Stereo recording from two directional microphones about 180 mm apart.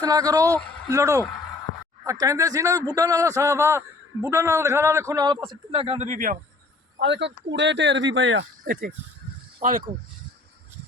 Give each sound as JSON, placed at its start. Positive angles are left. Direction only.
{"t": 0.0, "sound": "a man's voice", "side_deg": -20}
{"t": 7.0, "sound": "speech", "side_deg": -75}
{"t": 9.6, "sound": "speech", "side_deg": -50}